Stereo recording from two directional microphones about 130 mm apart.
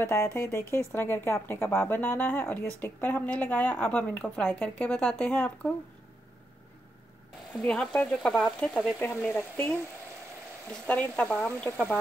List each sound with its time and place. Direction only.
0.0 s a woman's voice: 20° left (ahead or behind)
7.5 s frying: 5° left (ahead or behind)
8.5 s a woman's voice: 5° left (ahead or behind)